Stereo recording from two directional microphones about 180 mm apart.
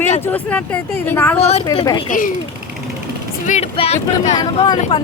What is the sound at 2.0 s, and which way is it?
Speech, 50° left (ahead or behind).